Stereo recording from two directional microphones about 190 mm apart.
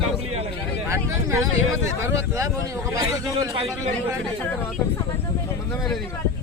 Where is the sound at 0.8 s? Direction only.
15° right (ahead or behind).